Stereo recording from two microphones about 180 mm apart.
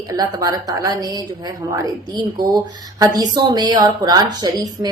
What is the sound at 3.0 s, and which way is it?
Speech, 20° right (ahead or behind).